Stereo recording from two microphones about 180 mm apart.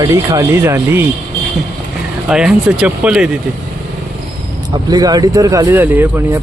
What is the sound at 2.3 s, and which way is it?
Speech, 5° right (ahead or behind).